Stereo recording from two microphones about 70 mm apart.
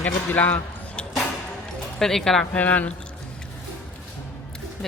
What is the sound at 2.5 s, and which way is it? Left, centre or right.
Speech, left.